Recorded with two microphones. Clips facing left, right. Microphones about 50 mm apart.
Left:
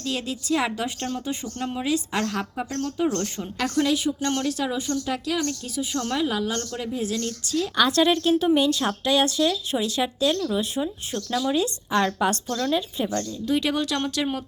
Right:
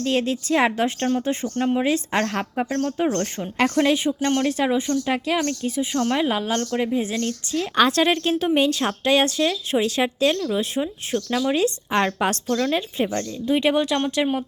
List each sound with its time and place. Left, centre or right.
0.0 s a woman's voice: right